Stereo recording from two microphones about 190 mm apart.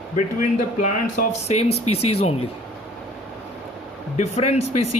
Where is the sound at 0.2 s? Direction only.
45° left (ahead or behind).